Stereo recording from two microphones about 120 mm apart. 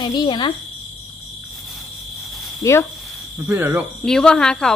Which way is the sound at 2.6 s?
30° left (ahead or behind).